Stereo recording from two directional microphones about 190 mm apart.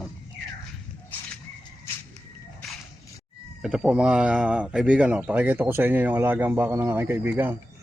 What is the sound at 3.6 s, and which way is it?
Speech, 5° right (ahead or behind).